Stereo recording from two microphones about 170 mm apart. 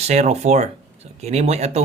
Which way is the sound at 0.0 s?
40° right (ahead or behind).